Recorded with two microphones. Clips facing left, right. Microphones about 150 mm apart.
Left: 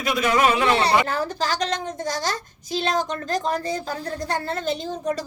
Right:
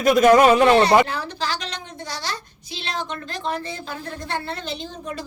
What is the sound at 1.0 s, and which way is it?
A woman's voice, 45° left (ahead or behind).